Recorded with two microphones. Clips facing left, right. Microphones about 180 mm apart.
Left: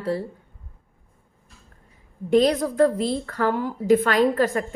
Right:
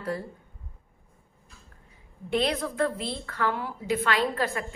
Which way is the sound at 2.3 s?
40° left (ahead or behind).